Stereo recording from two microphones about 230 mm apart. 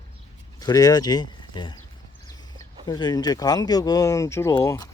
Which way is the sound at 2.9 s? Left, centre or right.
Centre.